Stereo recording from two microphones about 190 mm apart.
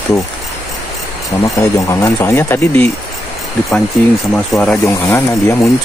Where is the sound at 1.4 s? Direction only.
15° left (ahead or behind).